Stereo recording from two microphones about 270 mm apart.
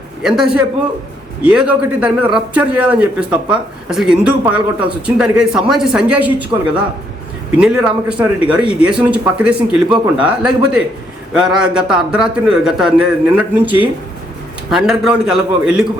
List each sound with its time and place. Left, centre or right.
0.2 s a man's voice: centre
7.6 s a man's voice: centre